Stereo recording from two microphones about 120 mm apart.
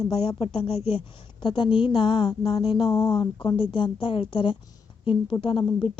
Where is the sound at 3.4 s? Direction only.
45° left (ahead or behind).